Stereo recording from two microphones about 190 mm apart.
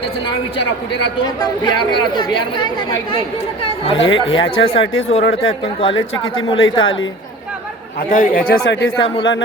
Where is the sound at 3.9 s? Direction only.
90° left.